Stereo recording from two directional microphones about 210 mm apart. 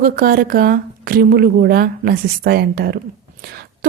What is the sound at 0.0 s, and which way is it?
Speech, 45° right (ahead or behind).